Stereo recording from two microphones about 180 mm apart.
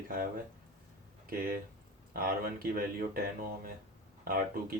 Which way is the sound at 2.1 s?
55° right (ahead or behind).